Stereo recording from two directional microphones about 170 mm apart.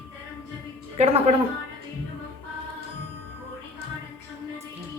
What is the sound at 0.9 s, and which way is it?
Speech, 35° right (ahead or behind).